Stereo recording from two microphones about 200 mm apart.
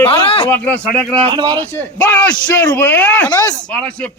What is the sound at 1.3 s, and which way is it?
Speech, 20° right (ahead or behind).